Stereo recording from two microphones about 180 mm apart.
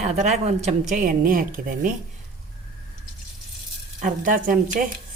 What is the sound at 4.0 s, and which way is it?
Speech, 50° right (ahead or behind).